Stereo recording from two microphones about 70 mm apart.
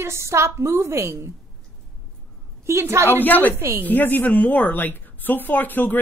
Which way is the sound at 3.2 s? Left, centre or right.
Left.